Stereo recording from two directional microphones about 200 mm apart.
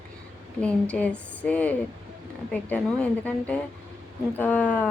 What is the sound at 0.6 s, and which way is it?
Speech, 5° left (ahead or behind).